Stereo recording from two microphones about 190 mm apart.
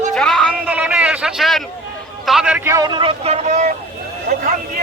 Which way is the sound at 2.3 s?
5° right (ahead or behind).